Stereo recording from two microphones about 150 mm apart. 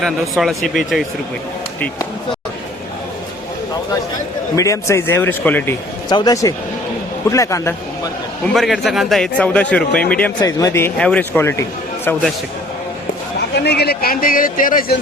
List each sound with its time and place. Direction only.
0.0 s speech: centre (ahead or behind)
4.5 s a man's voice: 20° left (ahead or behind)
6.1 s a man's voice: 25° left (ahead or behind)
8.5 s a man's voice: centre (ahead or behind)
10.4 s a man's voice: 20° left (ahead or behind)
13.6 s a man's voice: 90° left; by 14.9 s 70° left (ahead or behind)